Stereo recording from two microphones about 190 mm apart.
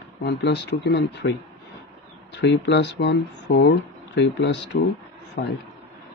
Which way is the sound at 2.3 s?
65° left (ahead or behind).